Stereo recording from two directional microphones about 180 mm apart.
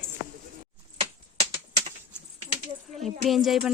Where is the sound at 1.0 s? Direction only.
35° right (ahead or behind).